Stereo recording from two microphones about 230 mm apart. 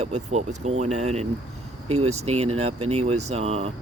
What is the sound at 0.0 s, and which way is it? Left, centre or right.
Speech, right.